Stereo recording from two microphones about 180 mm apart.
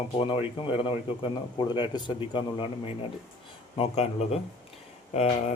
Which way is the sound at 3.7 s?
35° left (ahead or behind).